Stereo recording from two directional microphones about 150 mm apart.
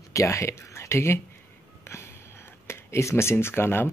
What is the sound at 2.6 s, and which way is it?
Speech, 20° left (ahead or behind).